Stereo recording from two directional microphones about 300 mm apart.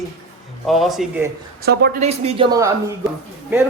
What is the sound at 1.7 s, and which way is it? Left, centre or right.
Speech, right.